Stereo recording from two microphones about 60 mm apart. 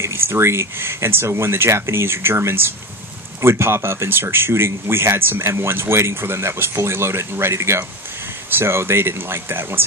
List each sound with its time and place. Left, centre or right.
0.0 s speech: right